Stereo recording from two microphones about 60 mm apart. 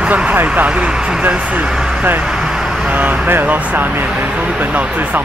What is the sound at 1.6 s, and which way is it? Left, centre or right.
Vehicle, centre.